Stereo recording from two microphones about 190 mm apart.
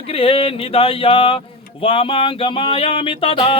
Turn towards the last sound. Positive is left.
turn(degrees=30)  # may be behind; listen again after turning